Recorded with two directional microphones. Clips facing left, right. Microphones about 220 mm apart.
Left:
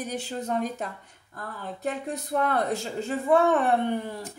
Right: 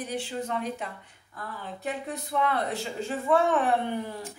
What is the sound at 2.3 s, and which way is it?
Speech, 45° left (ahead or behind).